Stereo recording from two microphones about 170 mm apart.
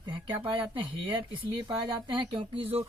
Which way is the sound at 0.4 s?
30° right (ahead or behind).